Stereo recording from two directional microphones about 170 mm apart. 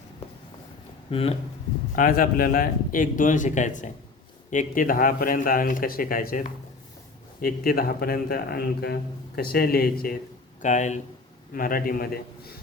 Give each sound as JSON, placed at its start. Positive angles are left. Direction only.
{"t": 1.1, "sound": "speech", "side_deg": 35}
{"t": 2.0, "sound": "a man's voice", "side_deg": 60}
{"t": 10.6, "sound": "a man's voice", "side_deg": 45}
{"t": 11.5, "sound": "speech", "side_deg": 55}